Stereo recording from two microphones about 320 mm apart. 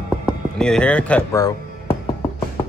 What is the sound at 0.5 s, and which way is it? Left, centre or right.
Speech, centre.